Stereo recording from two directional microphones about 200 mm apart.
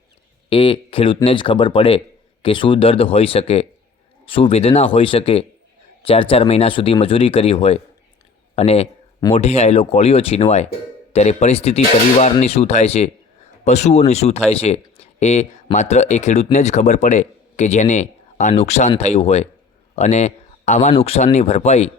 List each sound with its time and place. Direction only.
0.5 s speech: 25° left (ahead or behind)